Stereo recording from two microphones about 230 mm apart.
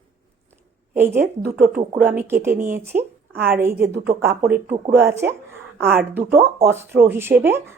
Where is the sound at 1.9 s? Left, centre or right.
Centre.